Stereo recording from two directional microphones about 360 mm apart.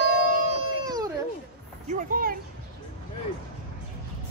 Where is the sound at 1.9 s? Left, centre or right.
Right.